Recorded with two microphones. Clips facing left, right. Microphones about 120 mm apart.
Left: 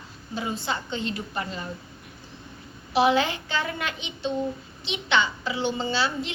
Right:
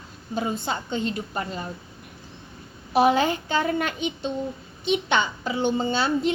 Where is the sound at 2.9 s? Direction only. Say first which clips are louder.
Right 2 dB; 45° right (ahead or behind).